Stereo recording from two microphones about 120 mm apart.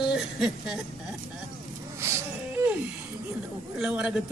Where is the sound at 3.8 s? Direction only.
5° right (ahead or behind).